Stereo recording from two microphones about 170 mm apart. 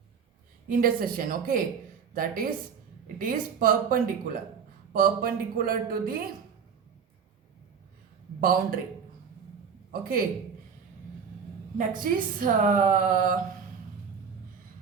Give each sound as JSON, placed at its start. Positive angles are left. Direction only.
{"t": 0.7, "sound": "speech", "side_deg": -60}
{"t": 8.4, "sound": "speech", "side_deg": -55}
{"t": 9.9, "sound": "speech", "side_deg": -60}
{"t": 11.8, "sound": "a woman's voice", "side_deg": -55}